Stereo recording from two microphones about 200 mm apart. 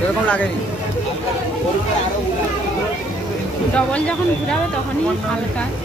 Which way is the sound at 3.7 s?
5° left (ahead or behind).